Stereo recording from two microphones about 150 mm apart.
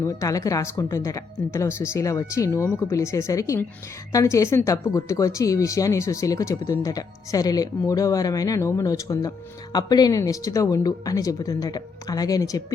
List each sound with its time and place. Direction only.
0.0 s speech: 20° left (ahead or behind)